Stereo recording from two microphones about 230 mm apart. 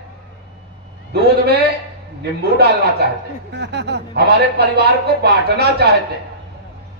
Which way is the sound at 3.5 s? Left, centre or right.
Right.